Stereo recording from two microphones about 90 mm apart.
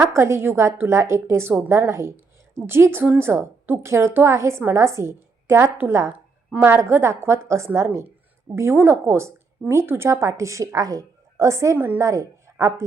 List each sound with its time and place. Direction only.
0.0 s a woman's voice: 30° right (ahead or behind)